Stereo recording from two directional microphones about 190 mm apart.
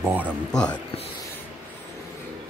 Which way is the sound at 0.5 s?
5° left (ahead or behind).